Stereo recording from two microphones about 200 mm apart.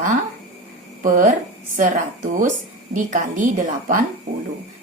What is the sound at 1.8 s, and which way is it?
A woman's voice, 40° right (ahead or behind).